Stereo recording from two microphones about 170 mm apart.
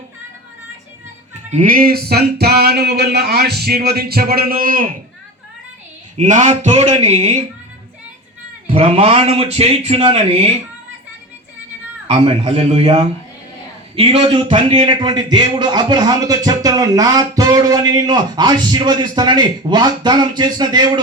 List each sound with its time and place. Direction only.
1.5 s music: 50° right (ahead or behind)
6.1 s speech: 45° right (ahead or behind)
8.6 s a man's voice: 35° right (ahead or behind)
12.0 s a man's voice: 35° right (ahead or behind)